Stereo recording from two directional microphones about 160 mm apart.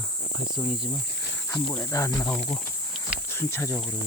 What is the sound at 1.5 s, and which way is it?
Speech, 15° left (ahead or behind).